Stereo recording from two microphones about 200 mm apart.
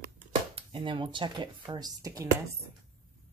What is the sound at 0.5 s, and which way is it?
Speech, 25° right (ahead or behind).